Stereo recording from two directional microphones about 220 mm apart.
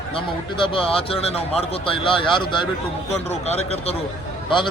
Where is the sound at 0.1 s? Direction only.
25° left (ahead or behind).